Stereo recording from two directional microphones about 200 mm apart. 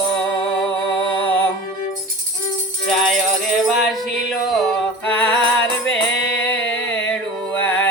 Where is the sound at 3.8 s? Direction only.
Centre (ahead or behind).